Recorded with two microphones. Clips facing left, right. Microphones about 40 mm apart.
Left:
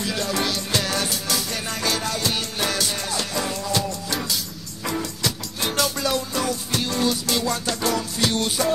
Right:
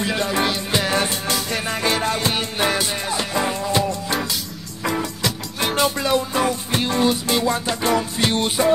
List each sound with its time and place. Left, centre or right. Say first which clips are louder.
0.0 s music: right 4 dB; right